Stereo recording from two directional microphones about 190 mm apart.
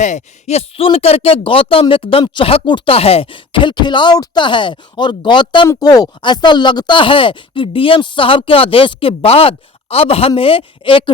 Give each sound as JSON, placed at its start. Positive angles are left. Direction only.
{"t": 0.0, "sound": "speech", "side_deg": 35}